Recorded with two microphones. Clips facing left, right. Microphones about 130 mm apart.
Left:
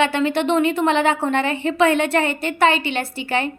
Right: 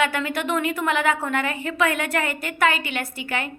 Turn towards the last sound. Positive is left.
turn(degrees=30)  # may be behind; listen again after turning